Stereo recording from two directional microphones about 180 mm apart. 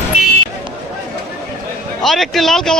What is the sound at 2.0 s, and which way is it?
Speech, centre (ahead or behind).